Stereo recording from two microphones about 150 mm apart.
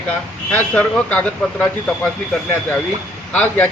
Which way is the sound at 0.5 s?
10° left (ahead or behind).